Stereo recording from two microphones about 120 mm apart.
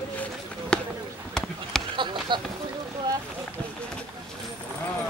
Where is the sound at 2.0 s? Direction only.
40° right (ahead or behind).